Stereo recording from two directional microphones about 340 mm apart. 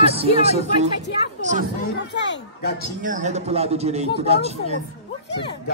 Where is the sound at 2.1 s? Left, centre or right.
Left.